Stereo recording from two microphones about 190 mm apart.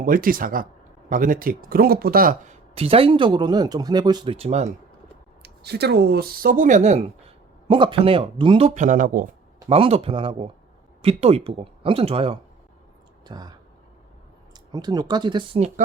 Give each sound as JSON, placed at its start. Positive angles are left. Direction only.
{"t": 0.0, "sound": "speech", "side_deg": -45}
{"t": 5.4, "sound": "speech", "side_deg": -60}
{"t": 9.6, "sound": "speech", "side_deg": -30}